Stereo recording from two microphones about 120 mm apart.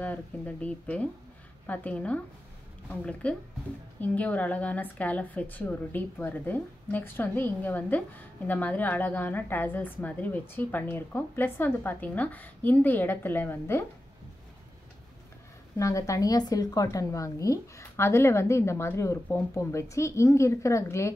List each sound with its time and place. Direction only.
0.0 s a woman's voice: 10° left (ahead or behind)
15.8 s speech: 25° left (ahead or behind)